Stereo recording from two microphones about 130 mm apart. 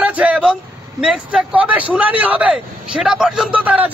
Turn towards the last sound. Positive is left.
turn(degrees=-10)  # may be behind; listen again after turning